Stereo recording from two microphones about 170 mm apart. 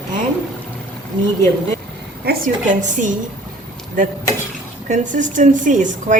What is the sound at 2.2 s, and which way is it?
Speech, 50° right (ahead or behind).